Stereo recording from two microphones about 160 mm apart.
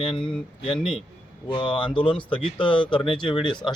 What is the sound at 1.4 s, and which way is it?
Speech, 30° left (ahead or behind).